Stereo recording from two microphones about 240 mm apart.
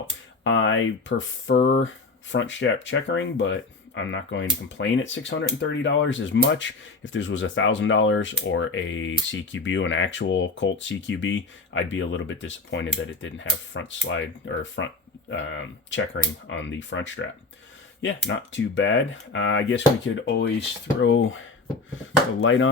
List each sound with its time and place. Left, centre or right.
0.4 s speech: left